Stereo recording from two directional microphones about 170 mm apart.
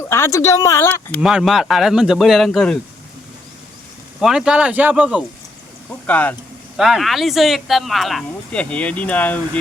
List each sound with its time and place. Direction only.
0.1 s speech: 15° left (ahead or behind)
1.2 s speech: 5° right (ahead or behind)
4.2 s speech: 5° right (ahead or behind)
6.1 s speech: 10° left (ahead or behind)
6.7 s speech: 5° right (ahead or behind)